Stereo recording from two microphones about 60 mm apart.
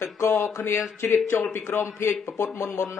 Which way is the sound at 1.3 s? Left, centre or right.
Left.